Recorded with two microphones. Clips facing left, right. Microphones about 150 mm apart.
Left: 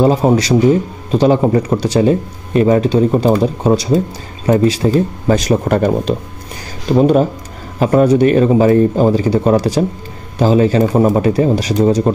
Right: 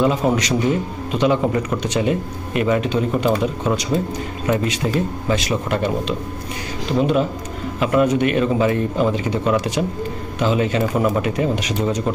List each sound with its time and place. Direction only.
0.0 s a man's voice: 35° left (ahead or behind)